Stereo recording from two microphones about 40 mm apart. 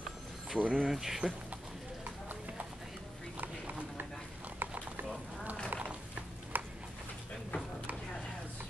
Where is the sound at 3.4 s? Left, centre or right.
Right.